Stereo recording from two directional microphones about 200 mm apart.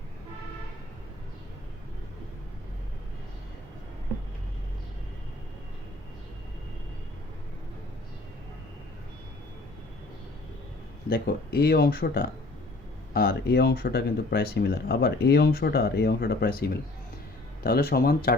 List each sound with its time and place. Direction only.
11.1 s speech: 50° left (ahead or behind)
17.6 s speech: 50° left (ahead or behind)